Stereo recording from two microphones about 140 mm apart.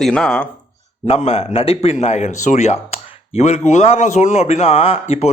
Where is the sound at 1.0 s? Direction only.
50° left (ahead or behind).